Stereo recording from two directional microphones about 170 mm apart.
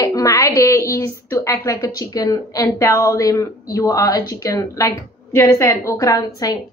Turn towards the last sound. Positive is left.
turn(degrees=20)  # may be behind; listen again after turning